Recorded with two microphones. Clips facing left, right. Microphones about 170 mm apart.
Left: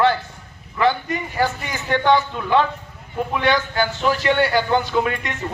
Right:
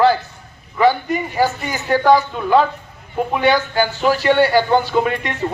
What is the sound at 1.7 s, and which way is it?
Speech, 35° right (ahead or behind).